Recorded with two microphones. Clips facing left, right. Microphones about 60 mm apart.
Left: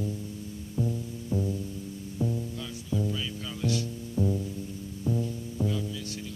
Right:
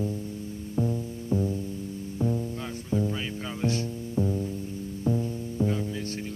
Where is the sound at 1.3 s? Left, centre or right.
Right.